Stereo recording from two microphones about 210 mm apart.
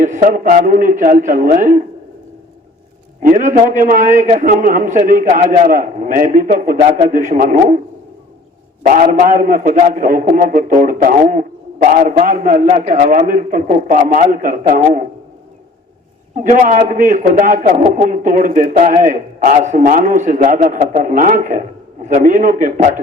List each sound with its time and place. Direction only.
0.0 s a man's voice: 35° right (ahead or behind)
3.2 s a man's voice: 35° right (ahead or behind)
8.9 s a man's voice: 35° right (ahead or behind)
16.3 s a man's voice: 35° right (ahead or behind)